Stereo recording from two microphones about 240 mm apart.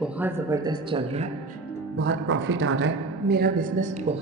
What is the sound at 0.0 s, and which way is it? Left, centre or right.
Speech, centre.